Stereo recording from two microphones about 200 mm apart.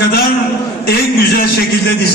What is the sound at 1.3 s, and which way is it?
Speech, 50° left (ahead or behind).